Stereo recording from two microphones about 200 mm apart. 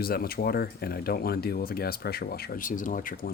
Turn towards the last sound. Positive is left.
turn(degrees=40)  # may be behind; listen again after turning